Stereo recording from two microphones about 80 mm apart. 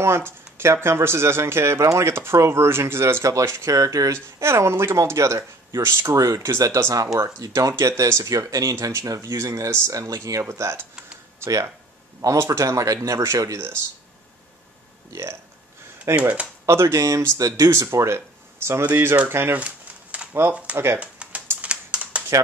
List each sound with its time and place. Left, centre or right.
0.0 s speech: right
6.1 s speech: right
10.4 s speech: right
16.2 s speech: centre
16.6 s speech: right
17.6 s speech: right
19.6 s a sound: centre
20.7 s speech: right
21.0 s typing: centre
21.5 s a sound: centre